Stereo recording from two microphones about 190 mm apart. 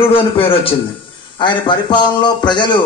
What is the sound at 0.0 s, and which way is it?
A man's voice, 30° left (ahead or behind).